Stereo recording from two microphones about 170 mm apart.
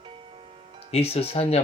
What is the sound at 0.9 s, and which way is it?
Speech, 35° left (ahead or behind).